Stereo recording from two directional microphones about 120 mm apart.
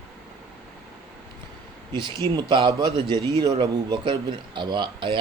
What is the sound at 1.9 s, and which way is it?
Speech, 40° right (ahead or behind).